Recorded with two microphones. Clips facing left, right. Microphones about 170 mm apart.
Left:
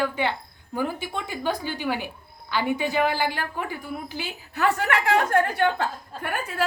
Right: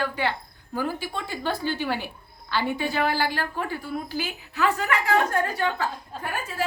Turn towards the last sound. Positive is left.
turn(degrees=60)  # may be behind; listen again after turning